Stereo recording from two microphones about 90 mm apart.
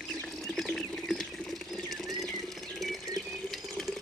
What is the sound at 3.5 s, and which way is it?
Water, centre (ahead or behind).